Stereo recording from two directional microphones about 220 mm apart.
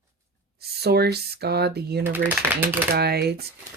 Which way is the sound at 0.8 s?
45° right (ahead or behind).